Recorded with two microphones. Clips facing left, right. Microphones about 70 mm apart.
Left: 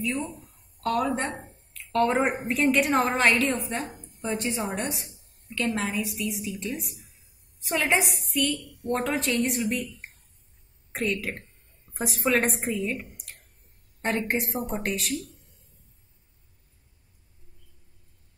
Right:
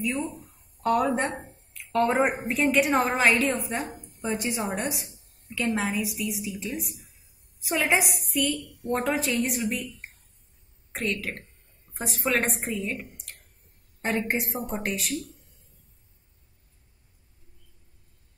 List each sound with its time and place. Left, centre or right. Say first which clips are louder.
0.0 s a woman's voice: right 1 dB; centre
1.2 s a sound: right 2 dB; centre
2.2 s a woman's voice: left 1 dB; centre